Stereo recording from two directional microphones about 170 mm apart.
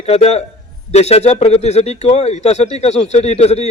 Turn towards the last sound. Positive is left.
turn(degrees=40)  # may be behind; listen again after turning